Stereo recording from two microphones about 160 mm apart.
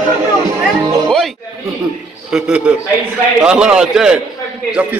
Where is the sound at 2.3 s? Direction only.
5° right (ahead or behind).